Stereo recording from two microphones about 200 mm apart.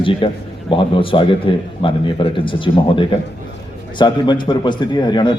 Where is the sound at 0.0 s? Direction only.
25° left (ahead or behind).